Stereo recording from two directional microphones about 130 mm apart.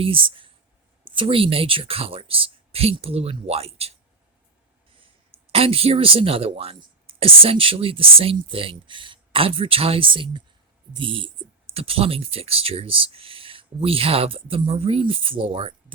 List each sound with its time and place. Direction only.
0.0 s speech: 45° right (ahead or behind)
5.5 s speech: 45° right (ahead or behind)